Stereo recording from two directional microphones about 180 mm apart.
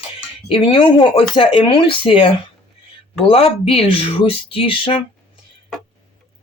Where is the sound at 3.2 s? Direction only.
30° left (ahead or behind).